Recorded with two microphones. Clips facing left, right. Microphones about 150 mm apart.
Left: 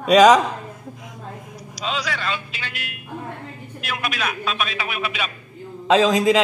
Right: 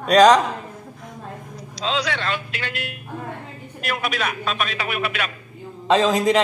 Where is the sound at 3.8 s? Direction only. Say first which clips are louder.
Right 2 dB; centre (ahead or behind).